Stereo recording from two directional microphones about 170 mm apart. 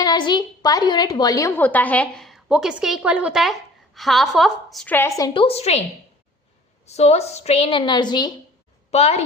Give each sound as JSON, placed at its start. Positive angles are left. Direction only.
{"t": 0.0, "sound": "a woman's voice", "side_deg": 25}
{"t": 5.3, "sound": "a woman's voice", "side_deg": 35}
{"t": 6.8, "sound": "a woman's voice", "side_deg": 40}
{"t": 8.9, "sound": "a woman's voice", "side_deg": 40}